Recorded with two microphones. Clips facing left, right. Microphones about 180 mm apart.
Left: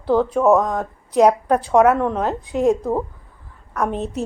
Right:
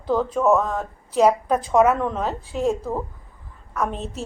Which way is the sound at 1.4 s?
70° left (ahead or behind).